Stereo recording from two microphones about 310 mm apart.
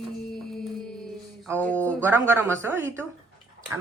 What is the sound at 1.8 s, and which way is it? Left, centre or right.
Speech, centre.